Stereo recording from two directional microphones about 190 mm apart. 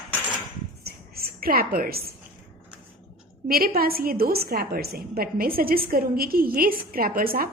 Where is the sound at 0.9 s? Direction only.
55° right (ahead or behind).